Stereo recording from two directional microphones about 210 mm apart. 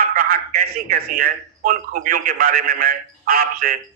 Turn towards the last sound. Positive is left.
turn(degrees=-45)  # may be behind; listen again after turning